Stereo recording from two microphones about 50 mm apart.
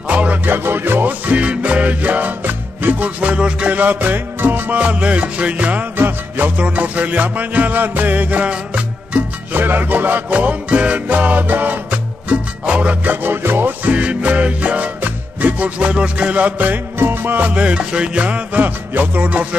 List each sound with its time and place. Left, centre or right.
0.1 s music: right
0.5 s music: right
4.7 s music: right
5.9 s music: right
6.5 s music: right
9.5 s music: right
13.1 s music: right
13.8 s music: right
17.0 s music: right
17.5 s music: right